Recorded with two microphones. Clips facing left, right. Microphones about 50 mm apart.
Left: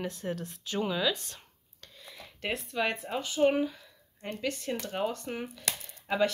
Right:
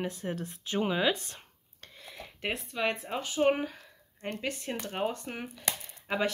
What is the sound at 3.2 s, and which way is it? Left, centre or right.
Speech, right.